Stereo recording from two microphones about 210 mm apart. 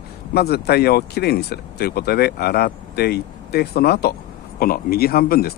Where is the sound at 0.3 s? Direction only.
50° left (ahead or behind).